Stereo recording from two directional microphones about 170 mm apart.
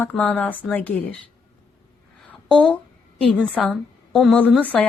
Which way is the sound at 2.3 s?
5° left (ahead or behind).